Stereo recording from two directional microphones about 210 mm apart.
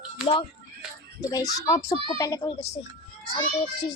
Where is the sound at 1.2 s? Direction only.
15° left (ahead or behind).